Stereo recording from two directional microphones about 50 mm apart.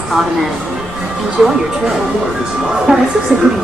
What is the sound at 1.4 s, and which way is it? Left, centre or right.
Speech, centre.